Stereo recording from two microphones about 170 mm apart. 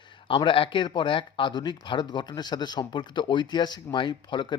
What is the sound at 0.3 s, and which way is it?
Speech, 30° left (ahead or behind).